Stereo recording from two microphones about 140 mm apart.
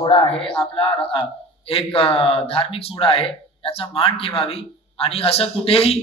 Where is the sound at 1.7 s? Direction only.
40° left (ahead or behind).